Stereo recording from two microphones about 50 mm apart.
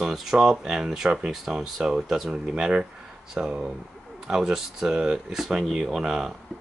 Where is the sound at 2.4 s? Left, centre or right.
Right.